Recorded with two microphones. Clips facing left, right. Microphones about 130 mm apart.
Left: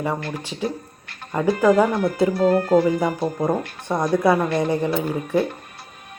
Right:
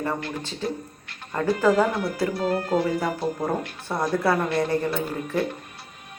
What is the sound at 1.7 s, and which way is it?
Speech, 45° left (ahead or behind).